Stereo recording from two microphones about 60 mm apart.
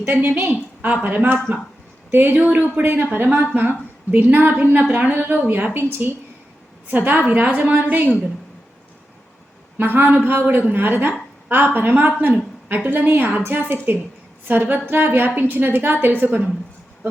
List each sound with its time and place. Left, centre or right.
0.0 s a woman's voice: right
0.8 s a woman's voice: right
2.3 s a woman's voice: right
2.8 s a woman's voice: right
9.7 s a woman's voice: right